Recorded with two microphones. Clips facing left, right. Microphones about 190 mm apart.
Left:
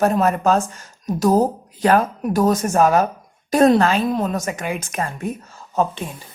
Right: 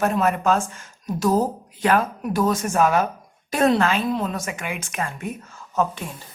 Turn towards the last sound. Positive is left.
turn(degrees=30)  # may be behind; listen again after turning